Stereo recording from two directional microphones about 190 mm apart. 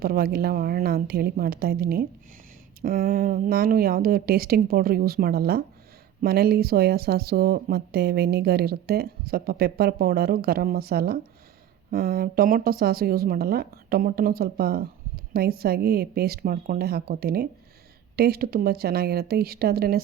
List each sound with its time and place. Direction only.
0.0 s a woman's voice: 55° right (ahead or behind)